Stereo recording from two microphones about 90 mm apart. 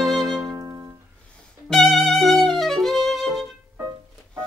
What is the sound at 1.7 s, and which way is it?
Violin, centre (ahead or behind).